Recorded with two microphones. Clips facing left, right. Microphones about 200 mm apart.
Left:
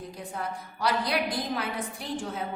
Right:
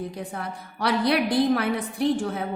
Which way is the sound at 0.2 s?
65° right (ahead or behind).